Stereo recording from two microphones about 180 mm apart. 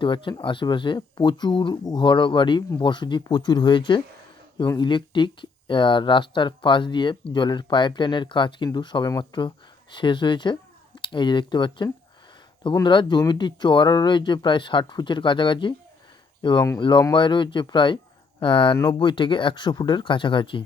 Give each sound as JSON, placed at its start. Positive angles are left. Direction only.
{"t": 0.0, "sound": "speech", "side_deg": 25}